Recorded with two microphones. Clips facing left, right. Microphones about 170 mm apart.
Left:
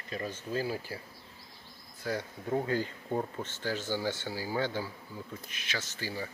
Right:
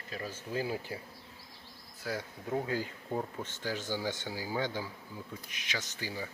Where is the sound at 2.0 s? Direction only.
5° right (ahead or behind).